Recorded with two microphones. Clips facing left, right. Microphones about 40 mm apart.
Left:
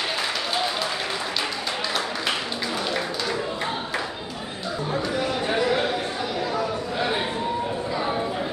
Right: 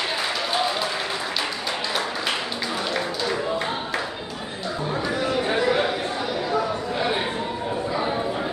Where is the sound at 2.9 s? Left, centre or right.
Centre.